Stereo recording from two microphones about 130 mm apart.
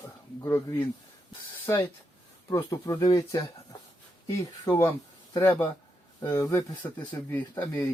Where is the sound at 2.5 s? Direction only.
30° left (ahead or behind).